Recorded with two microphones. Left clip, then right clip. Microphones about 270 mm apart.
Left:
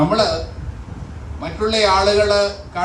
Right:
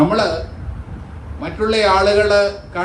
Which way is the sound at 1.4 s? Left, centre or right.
Left.